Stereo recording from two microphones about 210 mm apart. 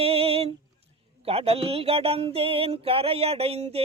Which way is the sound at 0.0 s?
30° right (ahead or behind).